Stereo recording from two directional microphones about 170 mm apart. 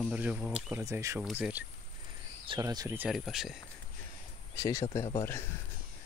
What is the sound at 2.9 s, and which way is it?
Speech, centre (ahead or behind).